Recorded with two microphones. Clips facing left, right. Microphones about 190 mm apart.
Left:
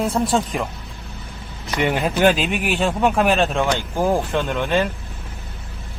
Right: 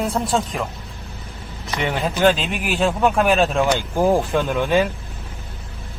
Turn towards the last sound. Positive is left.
turn(degrees=-10)  # may be behind; listen again after turning